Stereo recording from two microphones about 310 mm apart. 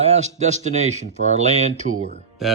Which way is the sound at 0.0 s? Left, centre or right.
Right.